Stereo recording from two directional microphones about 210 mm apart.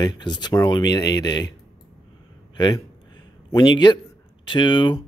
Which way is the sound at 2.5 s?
20° left (ahead or behind).